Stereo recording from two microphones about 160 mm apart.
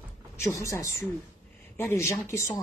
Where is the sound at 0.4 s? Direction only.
20° left (ahead or behind).